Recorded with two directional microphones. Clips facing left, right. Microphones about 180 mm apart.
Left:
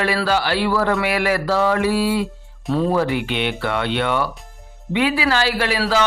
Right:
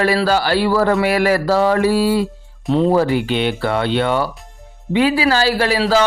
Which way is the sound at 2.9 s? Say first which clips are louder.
Right 4 dB; 35° right (ahead or behind).